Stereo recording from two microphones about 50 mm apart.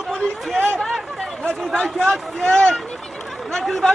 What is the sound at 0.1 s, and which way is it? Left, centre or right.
Chatter, centre.